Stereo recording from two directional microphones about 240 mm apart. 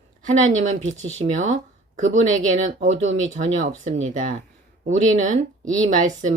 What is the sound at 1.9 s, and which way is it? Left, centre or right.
Speech, right.